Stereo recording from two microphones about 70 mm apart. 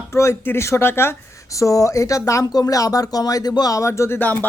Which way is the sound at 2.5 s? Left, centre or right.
Left.